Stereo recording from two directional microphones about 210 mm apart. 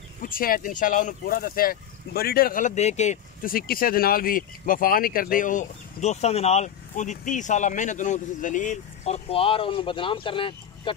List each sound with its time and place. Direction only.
0.2 s speech: 45° left (ahead or behind); by 11.0 s 25° left (ahead or behind)